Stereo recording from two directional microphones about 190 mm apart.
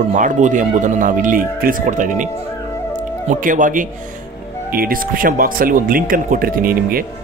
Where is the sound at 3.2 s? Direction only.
45° right (ahead or behind).